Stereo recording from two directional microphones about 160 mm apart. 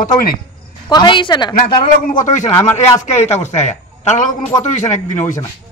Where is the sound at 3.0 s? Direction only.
45° left (ahead or behind).